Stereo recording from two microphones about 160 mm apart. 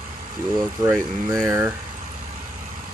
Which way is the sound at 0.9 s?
20° right (ahead or behind).